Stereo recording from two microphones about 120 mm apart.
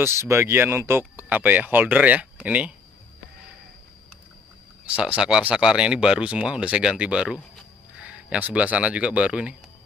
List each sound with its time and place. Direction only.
0.0 s speech: 20° right (ahead or behind)
4.8 s speech: 10° right (ahead or behind)